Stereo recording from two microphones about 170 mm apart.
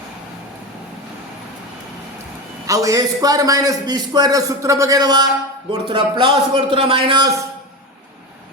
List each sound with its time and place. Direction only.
2.6 s a man's voice: 20° right (ahead or behind)